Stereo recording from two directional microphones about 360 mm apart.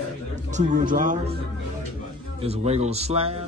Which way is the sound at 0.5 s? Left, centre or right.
Right.